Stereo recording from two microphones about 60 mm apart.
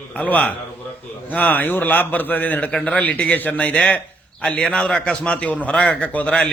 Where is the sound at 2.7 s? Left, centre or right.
Centre.